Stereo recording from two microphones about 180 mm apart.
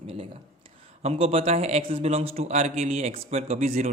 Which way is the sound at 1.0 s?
30° right (ahead or behind).